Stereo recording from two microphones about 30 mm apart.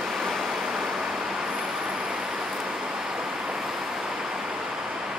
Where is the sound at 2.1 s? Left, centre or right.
Right.